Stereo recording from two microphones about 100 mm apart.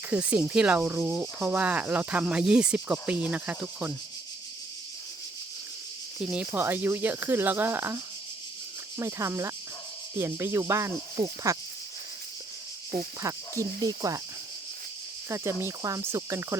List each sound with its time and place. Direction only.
0.1 s speech: 10° right (ahead or behind)
6.5 s speech: 20° right (ahead or behind)
13.2 s speech: 35° right (ahead or behind)
15.3 s speech: 30° right (ahead or behind)